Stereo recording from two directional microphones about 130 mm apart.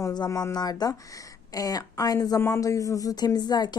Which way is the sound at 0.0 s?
30° left (ahead or behind).